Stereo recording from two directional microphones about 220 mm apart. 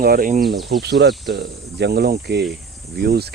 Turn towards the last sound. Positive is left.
turn(degrees=-45)  # may be behind; listen again after turning